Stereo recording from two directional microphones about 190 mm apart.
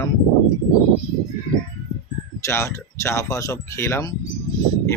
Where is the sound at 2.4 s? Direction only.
15° left (ahead or behind).